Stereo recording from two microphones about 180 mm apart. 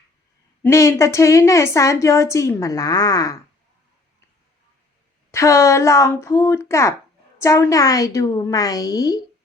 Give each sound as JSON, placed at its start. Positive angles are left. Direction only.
{"t": 0.6, "sound": "a woman's voice", "side_deg": 15}
{"t": 5.3, "sound": "a woman's voice", "side_deg": 15}